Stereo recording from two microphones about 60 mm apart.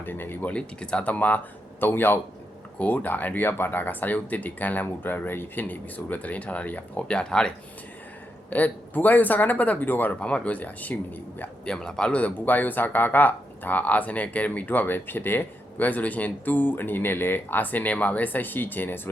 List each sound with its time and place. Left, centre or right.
0.0 s speech: left
0.5 s speech: centre
1.8 s speech: left; by 7.5 s centre
8.4 s speech: left
10.2 s speech: centre
11.6 s speech: centre
12.2 s speech: left